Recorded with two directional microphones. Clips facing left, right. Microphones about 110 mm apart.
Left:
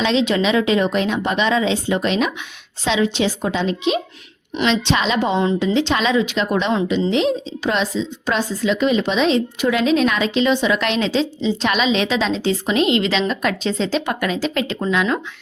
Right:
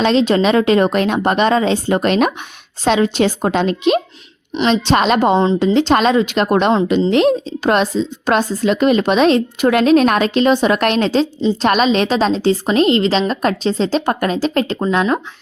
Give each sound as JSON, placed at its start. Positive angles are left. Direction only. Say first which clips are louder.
{"t": 0.0, "sound": "a woman's voice", "louder": "right 4 dB", "side_deg": -45}
{"t": 4.6, "sound": "a woman's voice", "louder": "right 4 dB", "side_deg": -40}